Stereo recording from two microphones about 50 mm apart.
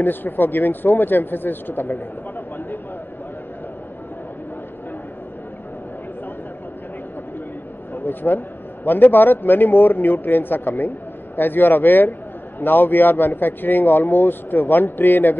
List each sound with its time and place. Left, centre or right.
0.0 s speech: left
7.9 s a man's voice: left